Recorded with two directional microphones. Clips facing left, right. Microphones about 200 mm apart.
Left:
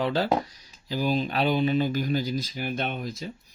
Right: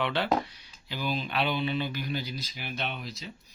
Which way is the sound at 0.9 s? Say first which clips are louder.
Left 6 dB; 40° left (ahead or behind).